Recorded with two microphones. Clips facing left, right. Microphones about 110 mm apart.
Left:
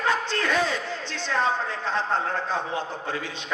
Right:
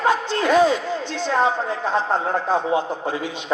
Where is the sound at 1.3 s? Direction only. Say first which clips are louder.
Right 5 dB; 15° right (ahead or behind).